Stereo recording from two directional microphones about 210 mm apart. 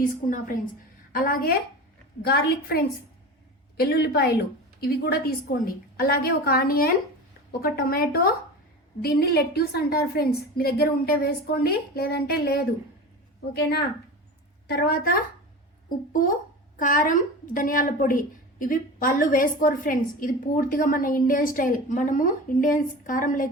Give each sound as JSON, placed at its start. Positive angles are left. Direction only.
{"t": 0.0, "sound": "a woman's voice", "side_deg": 40}
{"t": 16.2, "sound": "a woman's voice", "side_deg": 40}